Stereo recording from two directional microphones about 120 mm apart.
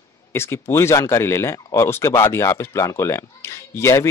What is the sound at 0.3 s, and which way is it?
Speech, 20° left (ahead or behind).